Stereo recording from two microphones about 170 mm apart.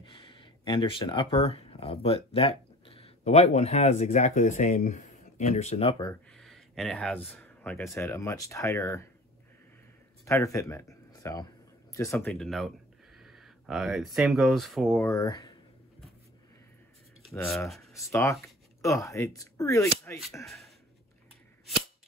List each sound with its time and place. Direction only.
0.0 s speech: 30° left (ahead or behind)
6.3 s speech: centre (ahead or behind); by 9.0 s 20° left (ahead or behind)
10.2 s speech: 20° left (ahead or behind)
12.3 s speech: 5° left (ahead or behind)
15.0 s speech: 20° left (ahead or behind)
17.9 s speech: 15° left (ahead or behind)
20.4 s speech: centre (ahead or behind)